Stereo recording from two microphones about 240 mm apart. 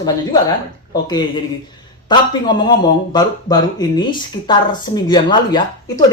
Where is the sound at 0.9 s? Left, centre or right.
Centre.